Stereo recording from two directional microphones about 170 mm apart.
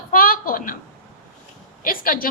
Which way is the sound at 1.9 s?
55° left (ahead or behind).